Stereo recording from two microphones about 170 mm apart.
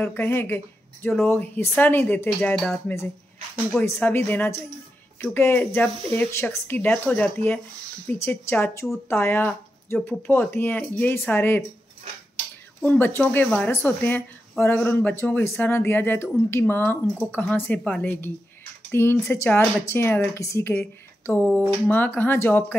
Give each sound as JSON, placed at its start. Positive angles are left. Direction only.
{"t": 0.0, "sound": "speech", "side_deg": 15}
{"t": 3.8, "sound": "speech", "side_deg": 10}
{"t": 12.8, "sound": "speech", "side_deg": 10}